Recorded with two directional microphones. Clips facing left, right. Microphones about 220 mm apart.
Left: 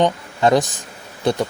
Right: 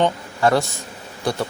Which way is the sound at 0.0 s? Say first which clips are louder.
Left 2 dB; 15° left (ahead or behind).